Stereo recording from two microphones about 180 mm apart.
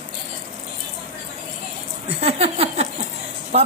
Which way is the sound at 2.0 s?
35° right (ahead or behind).